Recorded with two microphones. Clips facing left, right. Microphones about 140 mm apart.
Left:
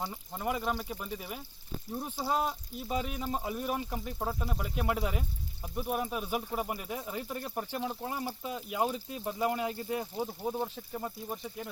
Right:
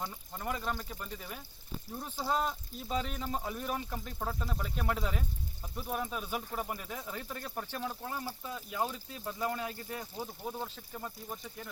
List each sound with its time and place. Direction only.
0.0 s speech: 10° left (ahead or behind)